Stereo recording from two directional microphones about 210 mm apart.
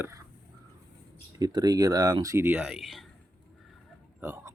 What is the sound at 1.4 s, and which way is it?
Speech, 20° right (ahead or behind).